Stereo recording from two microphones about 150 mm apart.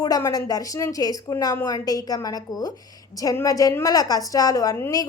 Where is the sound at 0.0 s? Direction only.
25° left (ahead or behind).